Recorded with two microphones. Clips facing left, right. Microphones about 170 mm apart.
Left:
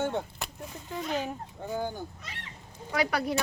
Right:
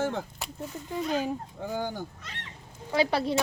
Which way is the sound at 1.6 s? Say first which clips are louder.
Left 1 dB; 90° right.